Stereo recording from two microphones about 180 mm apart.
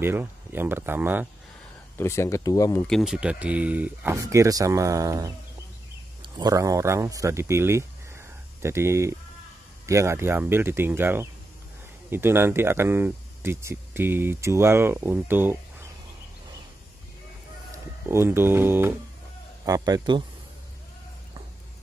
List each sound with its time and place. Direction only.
0.0 s speech: 10° right (ahead or behind)
2.0 s speech: 15° left (ahead or behind)
2.9 s speech: centre (ahead or behind)
17.6 s a man's voice: 15° right (ahead or behind)